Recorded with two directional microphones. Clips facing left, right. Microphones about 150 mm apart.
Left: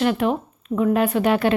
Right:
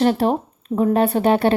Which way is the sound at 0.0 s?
35° right (ahead or behind).